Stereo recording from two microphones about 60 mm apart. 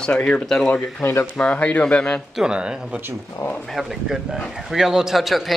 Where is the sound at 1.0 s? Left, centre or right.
Left.